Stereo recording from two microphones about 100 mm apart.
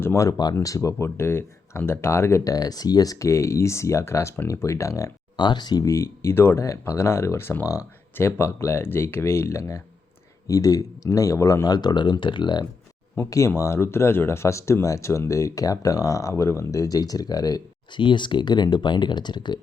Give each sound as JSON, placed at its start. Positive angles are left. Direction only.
{"t": 0.0, "sound": "speech", "side_deg": 30}
{"t": 5.4, "sound": "speech", "side_deg": 50}
{"t": 13.1, "sound": "speech", "side_deg": 30}
{"t": 18.0, "sound": "speech", "side_deg": 50}